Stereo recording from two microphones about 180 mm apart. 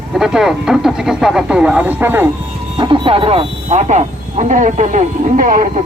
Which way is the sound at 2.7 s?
25° right (ahead or behind).